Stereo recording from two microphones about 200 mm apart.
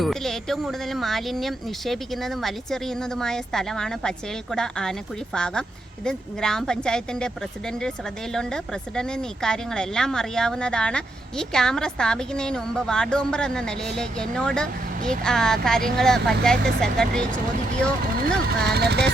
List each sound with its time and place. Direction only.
0.0 s speech: centre (ahead or behind)
18.4 s speech: 55° right (ahead or behind)